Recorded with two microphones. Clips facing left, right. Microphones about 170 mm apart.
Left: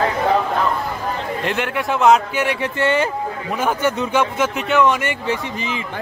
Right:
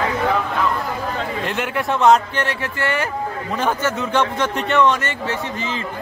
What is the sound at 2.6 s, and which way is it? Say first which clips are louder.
Speech: left 4 dB; 20° left (ahead or behind).